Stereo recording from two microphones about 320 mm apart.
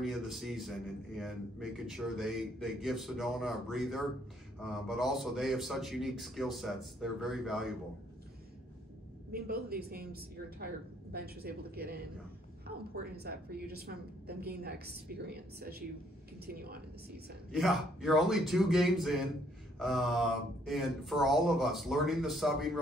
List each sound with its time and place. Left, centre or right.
0.0 s a man's voice: centre
9.3 s a woman's voice: right
17.5 s a man's voice: centre